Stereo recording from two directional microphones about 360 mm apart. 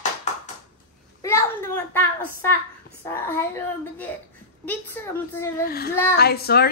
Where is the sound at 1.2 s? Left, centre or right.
Centre.